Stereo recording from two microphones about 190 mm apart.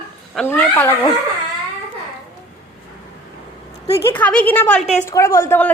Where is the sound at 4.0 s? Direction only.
10° left (ahead or behind).